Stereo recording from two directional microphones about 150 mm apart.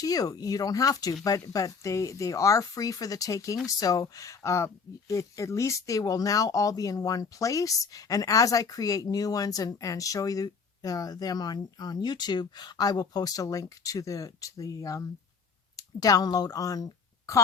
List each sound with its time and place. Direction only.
0.0 s speech: 25° left (ahead or behind)